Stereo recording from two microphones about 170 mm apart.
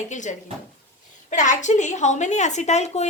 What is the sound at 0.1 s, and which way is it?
A woman's voice, 45° left (ahead or behind).